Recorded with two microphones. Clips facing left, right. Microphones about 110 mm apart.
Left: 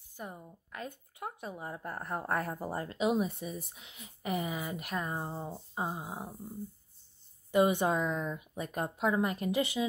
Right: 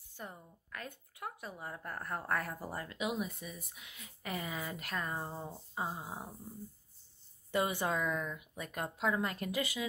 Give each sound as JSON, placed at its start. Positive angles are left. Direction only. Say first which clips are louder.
{"t": 0.1, "sound": "speech", "louder": "left 4 dB", "side_deg": 15}
{"t": 7.5, "sound": "speech", "louder": "left 6 dB", "side_deg": 20}